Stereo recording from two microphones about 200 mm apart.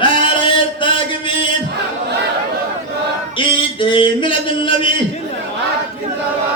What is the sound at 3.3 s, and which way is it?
Music, 25° left (ahead or behind).